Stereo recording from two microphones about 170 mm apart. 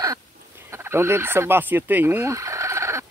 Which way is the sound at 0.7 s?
15° right (ahead or behind).